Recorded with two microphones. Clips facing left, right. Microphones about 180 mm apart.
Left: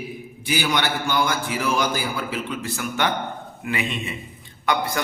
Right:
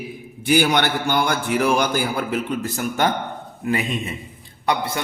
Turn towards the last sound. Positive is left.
turn(degrees=-30)  # may be behind; listen again after turning